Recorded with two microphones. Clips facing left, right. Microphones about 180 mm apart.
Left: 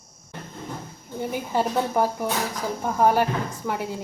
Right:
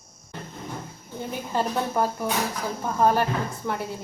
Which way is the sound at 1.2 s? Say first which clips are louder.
Left 2 dB; 15° left (ahead or behind).